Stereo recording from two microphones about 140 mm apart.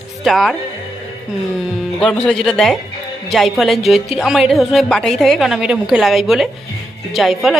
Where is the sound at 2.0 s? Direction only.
5° left (ahead or behind).